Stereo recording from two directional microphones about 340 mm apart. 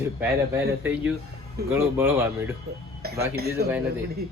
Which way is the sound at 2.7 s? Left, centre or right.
Right.